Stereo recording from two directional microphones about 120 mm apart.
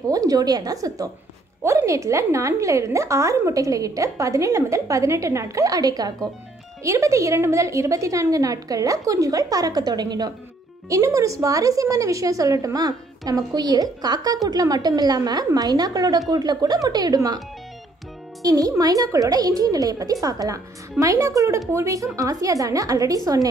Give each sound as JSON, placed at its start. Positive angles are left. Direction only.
{"t": 0.1, "sound": "a woman's voice", "side_deg": -30}
{"t": 18.4, "sound": "a woman's voice", "side_deg": -30}